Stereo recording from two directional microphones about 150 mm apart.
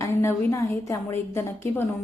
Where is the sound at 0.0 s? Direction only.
20° left (ahead or behind).